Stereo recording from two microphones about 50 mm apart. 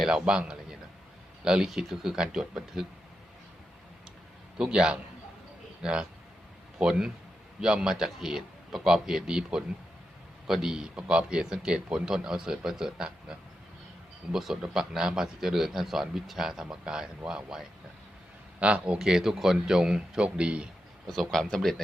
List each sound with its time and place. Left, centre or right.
0.1 s a man's voice: centre
4.5 s a man's voice: centre
14.3 s a man's voice: centre
18.6 s a man's voice: right
18.9 s a man's voice: centre
21.1 s a man's voice: centre